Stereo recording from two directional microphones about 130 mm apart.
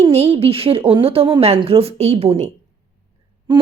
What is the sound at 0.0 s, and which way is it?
Speech, 50° right (ahead or behind).